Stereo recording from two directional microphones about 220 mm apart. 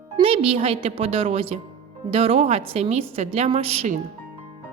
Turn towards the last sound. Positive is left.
turn(degrees=-30)  # may be behind; listen again after turning